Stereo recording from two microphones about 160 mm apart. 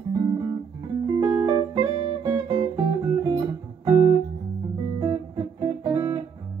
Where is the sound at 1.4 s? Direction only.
20° right (ahead or behind).